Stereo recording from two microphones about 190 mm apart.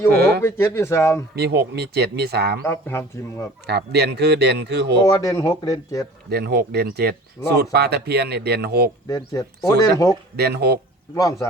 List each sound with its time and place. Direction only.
0.1 s speech: 55° right (ahead or behind)
0.4 s speech: 10° left (ahead or behind)
1.4 s speech: 60° right (ahead or behind)
2.6 s speech: 10° left (ahead or behind)
3.7 s speech: 60° right (ahead or behind)
5.0 s speech: 15° left (ahead or behind)
6.3 s speech: 55° right (ahead or behind)
9.0 s speech: 20° left (ahead or behind)
10.3 s speech: 60° right (ahead or behind)
11.1 s speech: 15° left (ahead or behind)